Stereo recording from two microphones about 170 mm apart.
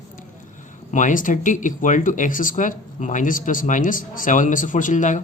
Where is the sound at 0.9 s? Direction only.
50° left (ahead or behind).